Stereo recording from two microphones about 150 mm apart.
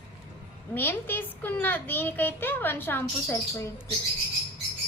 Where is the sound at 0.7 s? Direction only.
15° left (ahead or behind).